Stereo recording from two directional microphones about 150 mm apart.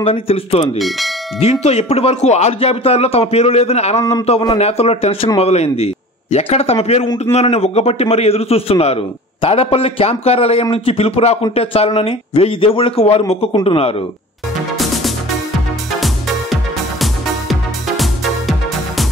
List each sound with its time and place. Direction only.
0.0 s a man's voice: 40° left (ahead or behind)
0.7 s speech: centre (ahead or behind)
1.4 s a man's voice: 45° left (ahead or behind)
17.0 s music: centre (ahead or behind)